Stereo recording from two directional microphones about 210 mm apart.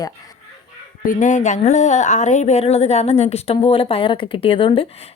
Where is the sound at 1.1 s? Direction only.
35° left (ahead or behind).